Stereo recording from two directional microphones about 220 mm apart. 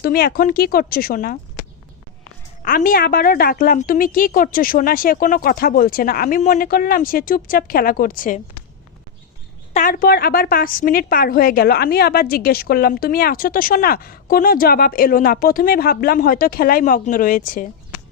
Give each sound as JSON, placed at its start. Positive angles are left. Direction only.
{"t": 0.0, "sound": "speech", "side_deg": 45}
{"t": 2.6, "sound": "a woman's voice", "side_deg": 40}
{"t": 9.7, "sound": "a woman's voice", "side_deg": 40}